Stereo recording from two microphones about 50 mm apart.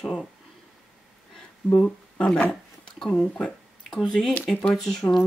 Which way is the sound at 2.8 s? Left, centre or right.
Centre.